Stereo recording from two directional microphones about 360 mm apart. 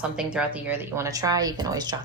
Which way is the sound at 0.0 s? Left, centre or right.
Centre.